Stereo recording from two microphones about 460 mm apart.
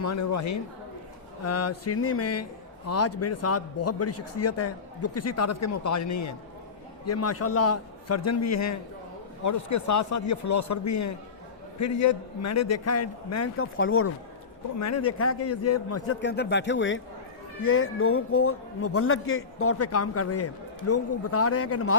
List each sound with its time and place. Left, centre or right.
0.0 s a man's voice: left